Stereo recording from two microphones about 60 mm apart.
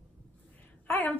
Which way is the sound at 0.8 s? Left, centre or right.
Left.